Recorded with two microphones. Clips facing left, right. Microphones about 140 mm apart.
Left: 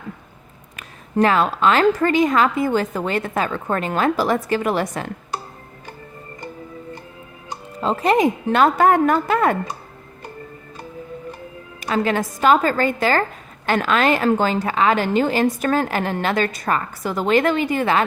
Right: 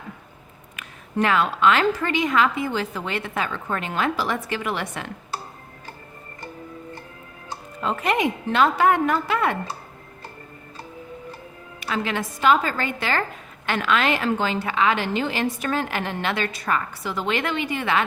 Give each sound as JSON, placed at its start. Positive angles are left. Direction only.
{"t": 0.8, "sound": "a woman's voice", "side_deg": 35}
{"t": 7.8, "sound": "speech", "side_deg": 30}
{"t": 8.4, "sound": "a woman's voice", "side_deg": 50}
{"t": 11.8, "sound": "a woman's voice", "side_deg": 40}